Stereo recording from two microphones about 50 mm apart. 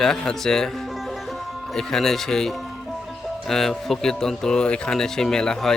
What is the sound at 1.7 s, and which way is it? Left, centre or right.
Speech, centre.